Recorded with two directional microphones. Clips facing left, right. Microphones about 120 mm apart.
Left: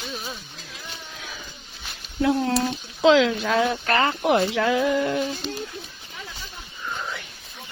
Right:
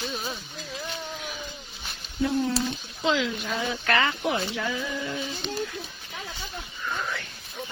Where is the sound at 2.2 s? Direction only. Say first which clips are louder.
Left 4 dB; 65° left (ahead or behind); by 3.7 s 85° left.